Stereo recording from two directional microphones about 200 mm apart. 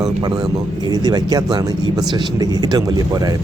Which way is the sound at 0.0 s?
20° right (ahead or behind).